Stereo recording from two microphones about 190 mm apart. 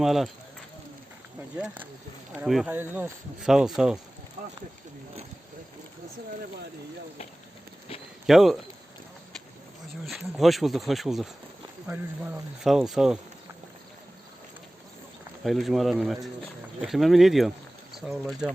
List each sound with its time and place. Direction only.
0.0 s speech: centre (ahead or behind)
1.6 s speech: 10° right (ahead or behind)
4.4 s speech: 45° right (ahead or behind)
8.3 s speech: centre (ahead or behind)
10.1 s speech: centre (ahead or behind)
15.4 s speech: centre (ahead or behind)